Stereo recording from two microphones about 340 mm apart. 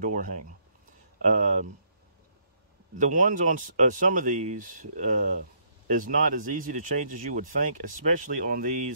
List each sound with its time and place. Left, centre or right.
0.0 s speech: right
3.0 s speech: right